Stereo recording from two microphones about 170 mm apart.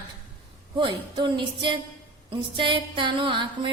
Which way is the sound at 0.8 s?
30° right (ahead or behind).